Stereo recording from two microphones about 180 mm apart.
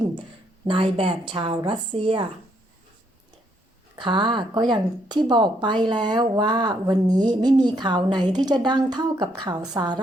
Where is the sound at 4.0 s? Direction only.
25° right (ahead or behind).